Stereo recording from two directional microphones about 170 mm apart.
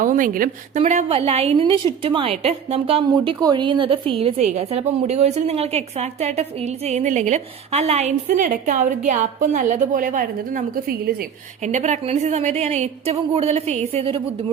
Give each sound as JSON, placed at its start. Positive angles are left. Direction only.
{"t": 0.0, "sound": "a woman's voice", "side_deg": -55}
{"t": 0.8, "sound": "a woman's voice", "side_deg": -40}
{"t": 11.6, "sound": "a woman's voice", "side_deg": -45}